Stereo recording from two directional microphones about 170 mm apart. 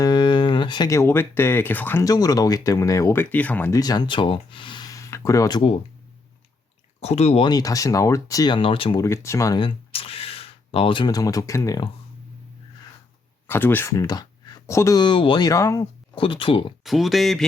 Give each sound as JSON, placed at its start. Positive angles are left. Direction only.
{"t": 0.0, "sound": "speech", "side_deg": 25}
{"t": 3.8, "sound": "speech", "side_deg": 25}
{"t": 7.0, "sound": "speech", "side_deg": 40}
{"t": 9.0, "sound": "speech", "side_deg": 15}
{"t": 9.6, "sound": "speech", "side_deg": 35}
{"t": 13.5, "sound": "speech", "side_deg": 10}
{"t": 16.1, "sound": "speech", "side_deg": 30}
{"t": 16.8, "sound": "speech", "side_deg": 0}